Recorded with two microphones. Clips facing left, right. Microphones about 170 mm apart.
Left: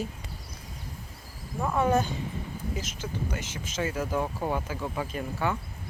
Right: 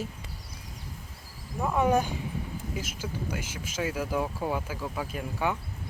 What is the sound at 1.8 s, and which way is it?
Speech, 10° right (ahead or behind).